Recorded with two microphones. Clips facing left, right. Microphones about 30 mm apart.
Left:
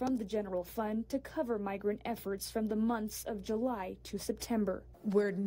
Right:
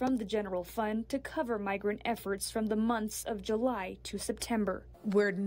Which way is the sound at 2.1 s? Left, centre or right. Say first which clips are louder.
Right 2 dB; right.